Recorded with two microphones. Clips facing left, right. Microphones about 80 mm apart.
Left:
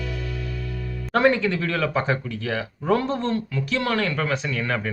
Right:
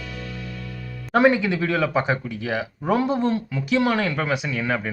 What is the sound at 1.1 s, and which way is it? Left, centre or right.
Speech, centre.